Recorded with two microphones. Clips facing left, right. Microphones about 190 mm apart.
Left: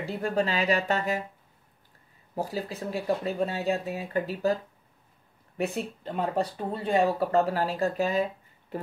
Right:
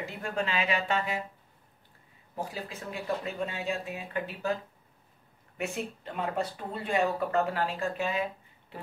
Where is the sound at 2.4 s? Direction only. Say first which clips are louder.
Left 6 dB; 40° left (ahead or behind).